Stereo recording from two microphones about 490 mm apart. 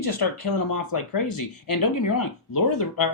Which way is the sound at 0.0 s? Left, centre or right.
Left.